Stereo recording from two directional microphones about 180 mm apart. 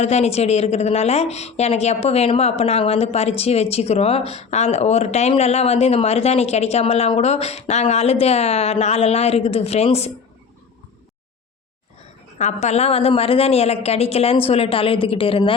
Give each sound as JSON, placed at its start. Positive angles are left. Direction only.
{"t": 0.0, "sound": "a woman's voice", "side_deg": 35}
{"t": 12.4, "sound": "a woman's voice", "side_deg": 40}